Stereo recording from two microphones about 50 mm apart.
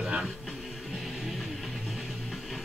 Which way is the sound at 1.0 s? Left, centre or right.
Centre.